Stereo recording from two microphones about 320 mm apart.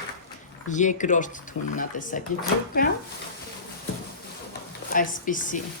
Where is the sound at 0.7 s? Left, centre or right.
Left.